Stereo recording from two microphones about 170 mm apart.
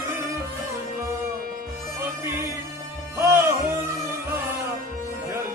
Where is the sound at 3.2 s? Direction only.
15° right (ahead or behind).